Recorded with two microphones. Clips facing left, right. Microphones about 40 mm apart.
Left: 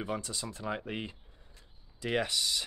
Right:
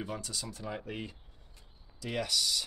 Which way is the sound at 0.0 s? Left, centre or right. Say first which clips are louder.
Left 3 dB; left.